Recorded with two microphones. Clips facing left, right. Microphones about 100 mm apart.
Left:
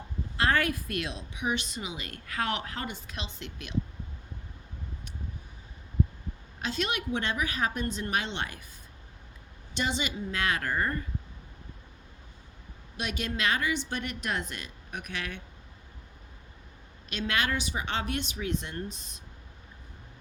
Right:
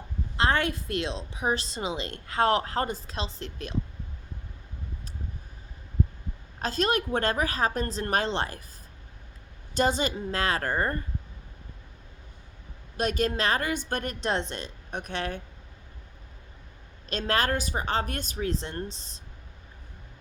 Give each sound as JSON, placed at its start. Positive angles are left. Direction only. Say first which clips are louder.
{"t": 0.3, "sound": "a woman's voice", "louder": "right 1 dB", "side_deg": -25}
{"t": 6.6, "sound": "a woman's voice", "louder": "right 5 dB", "side_deg": -40}
{"t": 9.7, "sound": "a woman's voice", "louder": "right 6 dB", "side_deg": -40}
{"t": 13.0, "sound": "a woman's voice", "louder": "right 6 dB", "side_deg": -40}
{"t": 14.2, "sound": "a woman's voice", "louder": "right 5 dB", "side_deg": -30}
{"t": 17.1, "sound": "a woman's voice", "louder": "right 4 dB", "side_deg": -35}